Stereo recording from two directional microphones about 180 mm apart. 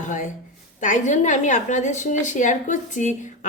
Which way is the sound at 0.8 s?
45° left (ahead or behind).